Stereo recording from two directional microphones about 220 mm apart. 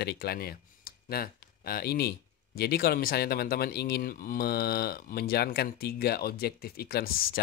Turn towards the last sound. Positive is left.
turn(degrees=45)  # may be behind; listen again after turning